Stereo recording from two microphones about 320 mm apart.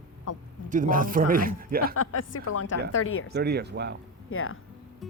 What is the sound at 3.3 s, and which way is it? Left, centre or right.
Speech, right.